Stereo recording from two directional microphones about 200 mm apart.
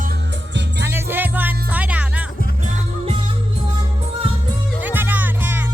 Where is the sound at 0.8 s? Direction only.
10° right (ahead or behind).